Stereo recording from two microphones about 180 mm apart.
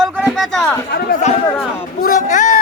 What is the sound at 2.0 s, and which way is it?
Speech, 55° left (ahead or behind).